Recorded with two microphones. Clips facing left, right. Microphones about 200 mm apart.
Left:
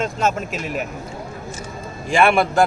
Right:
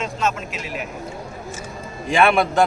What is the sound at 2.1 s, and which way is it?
Speech, centre (ahead or behind).